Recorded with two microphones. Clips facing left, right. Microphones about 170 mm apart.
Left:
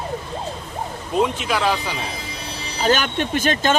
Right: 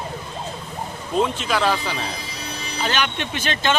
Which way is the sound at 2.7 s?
40° left (ahead or behind).